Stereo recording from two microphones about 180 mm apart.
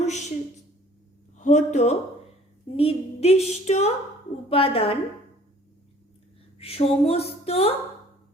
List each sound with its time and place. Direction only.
0.0 s a sound: 40° left (ahead or behind)
1.4 s a woman's voice: 40° left (ahead or behind)
6.6 s a woman's voice: 35° left (ahead or behind)